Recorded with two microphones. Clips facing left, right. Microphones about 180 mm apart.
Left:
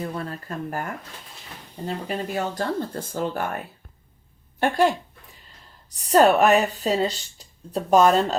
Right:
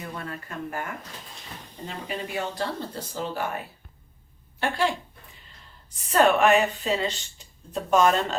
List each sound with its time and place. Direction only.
0.0 s speech: 35° left (ahead or behind); by 3.6 s 50° left (ahead or behind)
4.6 s speech: 45° left (ahead or behind)